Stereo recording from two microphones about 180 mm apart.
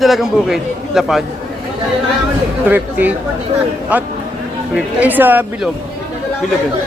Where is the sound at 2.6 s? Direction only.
10° right (ahead or behind).